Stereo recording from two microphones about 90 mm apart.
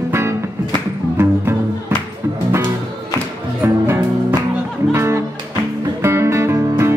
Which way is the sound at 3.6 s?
25° right (ahead or behind).